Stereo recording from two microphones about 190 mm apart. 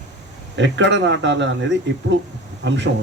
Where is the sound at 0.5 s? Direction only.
70° right (ahead or behind).